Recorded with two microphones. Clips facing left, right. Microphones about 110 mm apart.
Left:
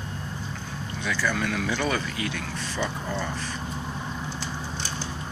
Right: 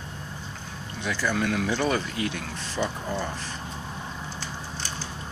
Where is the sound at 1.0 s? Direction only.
15° right (ahead or behind).